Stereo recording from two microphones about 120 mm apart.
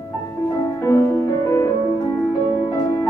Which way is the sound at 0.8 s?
25° left (ahead or behind).